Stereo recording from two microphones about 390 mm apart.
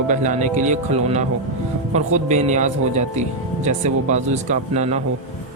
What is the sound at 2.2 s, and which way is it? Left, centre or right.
Speech, centre.